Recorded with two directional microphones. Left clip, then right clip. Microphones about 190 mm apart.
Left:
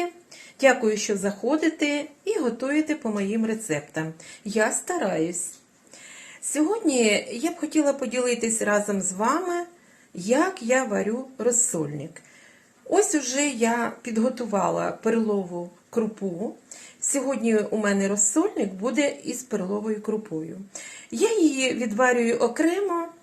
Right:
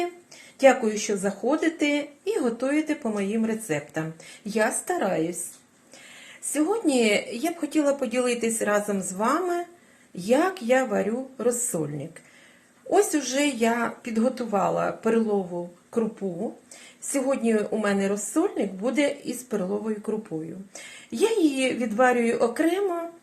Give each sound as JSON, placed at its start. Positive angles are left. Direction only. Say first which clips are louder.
{"t": 0.6, "sound": "speech", "louder": "right 1 dB", "side_deg": 0}
{"t": 6.5, "sound": "speech", "louder": "even", "side_deg": 0}
{"t": 17.1, "sound": "speech", "louder": "even", "side_deg": 0}